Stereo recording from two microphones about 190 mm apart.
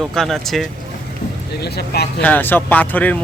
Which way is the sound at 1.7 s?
55° left (ahead or behind).